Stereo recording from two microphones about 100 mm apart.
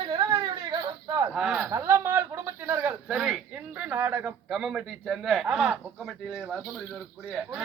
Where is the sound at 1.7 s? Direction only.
30° right (ahead or behind).